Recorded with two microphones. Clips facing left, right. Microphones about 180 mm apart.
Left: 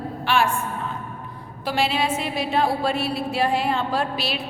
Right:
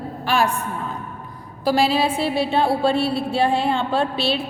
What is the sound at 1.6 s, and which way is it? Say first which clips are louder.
A woman's voice: right 5 dB; 35° right (ahead or behind).